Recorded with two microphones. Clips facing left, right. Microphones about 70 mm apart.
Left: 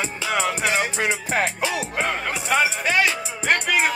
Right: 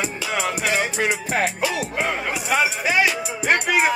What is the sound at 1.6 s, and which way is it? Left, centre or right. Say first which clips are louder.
Music: right 1 dB; left.